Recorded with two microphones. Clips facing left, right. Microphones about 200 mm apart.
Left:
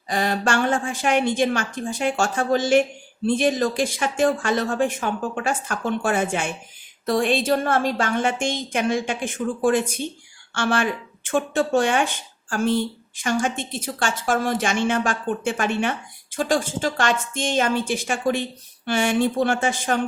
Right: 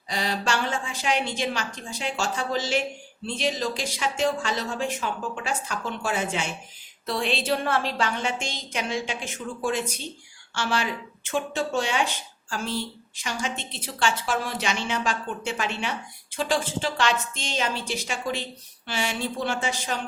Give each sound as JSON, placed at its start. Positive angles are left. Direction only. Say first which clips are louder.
{"t": 0.1, "sound": "a woman's voice", "louder": "left 5 dB", "side_deg": 50}